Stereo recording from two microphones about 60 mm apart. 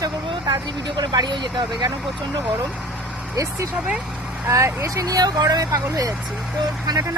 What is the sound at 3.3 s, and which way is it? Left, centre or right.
Speech, right.